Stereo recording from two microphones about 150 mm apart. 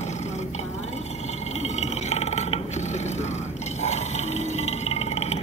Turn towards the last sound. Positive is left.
turn(degrees=45)  # may be behind; listen again after turning